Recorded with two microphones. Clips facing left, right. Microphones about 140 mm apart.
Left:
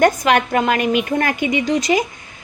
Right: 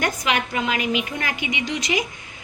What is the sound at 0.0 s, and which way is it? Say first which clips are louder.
Speech: left 9 dB; 50° left (ahead or behind).